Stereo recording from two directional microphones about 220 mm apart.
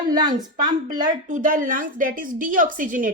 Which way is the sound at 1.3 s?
35° right (ahead or behind).